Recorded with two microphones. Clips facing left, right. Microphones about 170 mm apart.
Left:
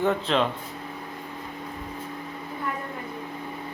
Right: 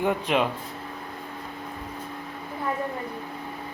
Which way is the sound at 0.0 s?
10° right (ahead or behind).